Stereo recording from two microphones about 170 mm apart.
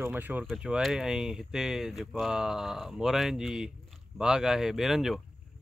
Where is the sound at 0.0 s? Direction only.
10° right (ahead or behind).